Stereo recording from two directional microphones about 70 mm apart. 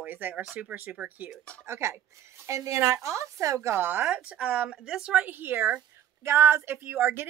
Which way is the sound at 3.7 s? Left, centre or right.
Right.